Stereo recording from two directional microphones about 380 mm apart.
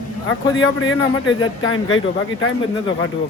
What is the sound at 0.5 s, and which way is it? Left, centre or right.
Speech, left.